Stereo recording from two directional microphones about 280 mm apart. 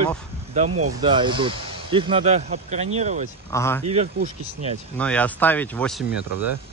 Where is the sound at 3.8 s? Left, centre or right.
Right.